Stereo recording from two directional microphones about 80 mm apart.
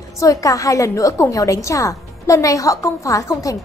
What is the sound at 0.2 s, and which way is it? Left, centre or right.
A woman's voice, left.